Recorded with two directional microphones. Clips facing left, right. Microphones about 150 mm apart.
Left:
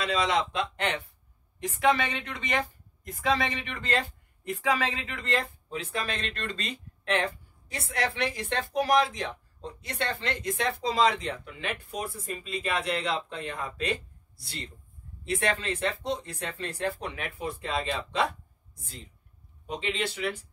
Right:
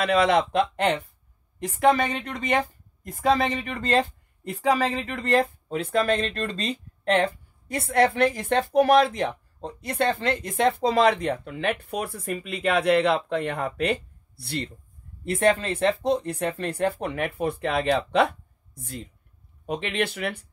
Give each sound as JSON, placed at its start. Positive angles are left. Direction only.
{"t": 0.0, "sound": "speech", "side_deg": -60}
{"t": 1.6, "sound": "speech", "side_deg": -40}
{"t": 5.4, "sound": "speech", "side_deg": -60}
{"t": 7.6, "sound": "speech", "side_deg": -55}